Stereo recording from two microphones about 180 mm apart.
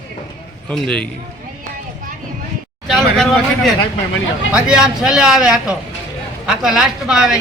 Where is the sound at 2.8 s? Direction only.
Centre (ahead or behind).